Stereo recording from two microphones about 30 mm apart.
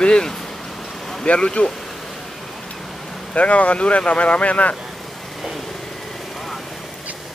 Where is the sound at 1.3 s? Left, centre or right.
Left.